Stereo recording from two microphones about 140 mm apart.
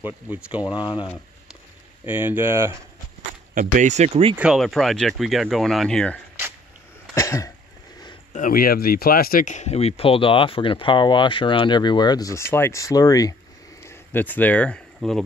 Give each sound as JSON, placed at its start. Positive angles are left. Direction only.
{"t": 0.0, "sound": "speech", "side_deg": -10}
{"t": 0.7, "sound": "speech", "side_deg": 40}
{"t": 2.0, "sound": "speech", "side_deg": -15}
{"t": 3.5, "sound": "speech", "side_deg": -60}
{"t": 4.4, "sound": "speech", "side_deg": 0}
{"t": 7.2, "sound": "cough", "side_deg": 25}
{"t": 8.3, "sound": "speech", "side_deg": 80}
{"t": 13.8, "sound": "speech", "side_deg": 15}